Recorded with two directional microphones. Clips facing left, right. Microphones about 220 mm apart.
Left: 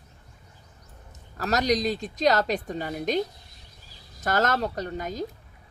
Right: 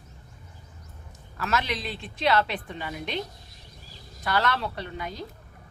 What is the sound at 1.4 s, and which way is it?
A woman's voice, 40° left (ahead or behind).